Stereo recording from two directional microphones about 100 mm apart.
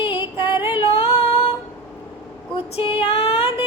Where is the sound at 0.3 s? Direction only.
55° left (ahead or behind).